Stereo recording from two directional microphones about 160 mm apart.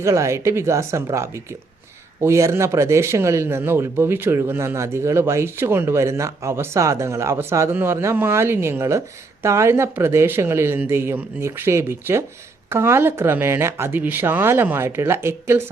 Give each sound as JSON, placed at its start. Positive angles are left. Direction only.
{"t": 0.0, "sound": "speech", "side_deg": -20}